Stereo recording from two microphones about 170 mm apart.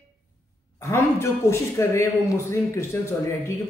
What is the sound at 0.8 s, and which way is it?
A man's voice, 15° left (ahead or behind).